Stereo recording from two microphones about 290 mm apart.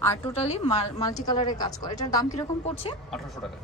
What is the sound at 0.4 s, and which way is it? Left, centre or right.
A woman's voice, left.